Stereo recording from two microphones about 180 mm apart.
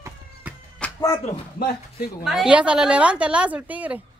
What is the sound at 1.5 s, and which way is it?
Speech, 55° left (ahead or behind).